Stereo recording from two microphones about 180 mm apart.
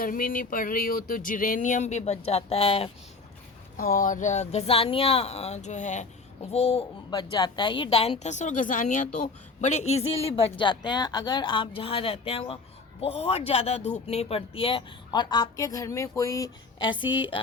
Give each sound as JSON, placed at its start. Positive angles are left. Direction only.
{"t": 0.0, "sound": "a sound", "side_deg": 50}
{"t": 3.8, "sound": "speech", "side_deg": 50}
{"t": 7.1, "sound": "speech", "side_deg": 25}